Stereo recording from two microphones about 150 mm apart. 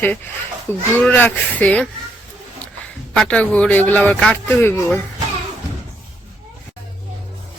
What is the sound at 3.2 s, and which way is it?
A man's voice, 5° left (ahead or behind).